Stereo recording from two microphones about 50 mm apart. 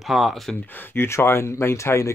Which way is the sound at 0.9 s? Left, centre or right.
Left.